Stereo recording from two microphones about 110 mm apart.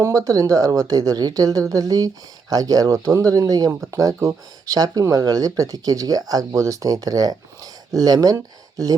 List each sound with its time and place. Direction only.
0.3 s speech: 30° right (ahead or behind)